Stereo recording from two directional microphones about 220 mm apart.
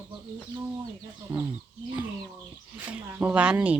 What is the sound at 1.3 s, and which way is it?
Speech, 20° right (ahead or behind).